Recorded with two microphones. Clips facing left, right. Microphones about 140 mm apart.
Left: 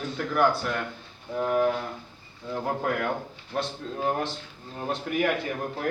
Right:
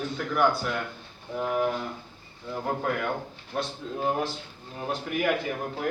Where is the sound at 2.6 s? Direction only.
Centre (ahead or behind).